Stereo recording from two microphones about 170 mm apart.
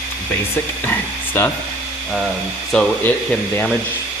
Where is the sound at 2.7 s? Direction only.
5° left (ahead or behind).